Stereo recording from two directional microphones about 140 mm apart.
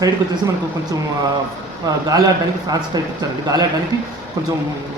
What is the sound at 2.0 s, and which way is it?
A man's voice, 25° right (ahead or behind).